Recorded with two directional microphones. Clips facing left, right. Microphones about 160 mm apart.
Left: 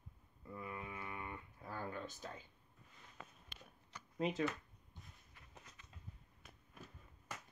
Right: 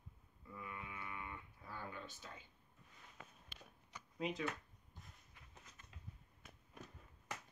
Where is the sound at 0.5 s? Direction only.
35° left (ahead or behind).